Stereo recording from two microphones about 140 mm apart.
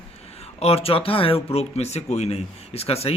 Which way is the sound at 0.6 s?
45° left (ahead or behind).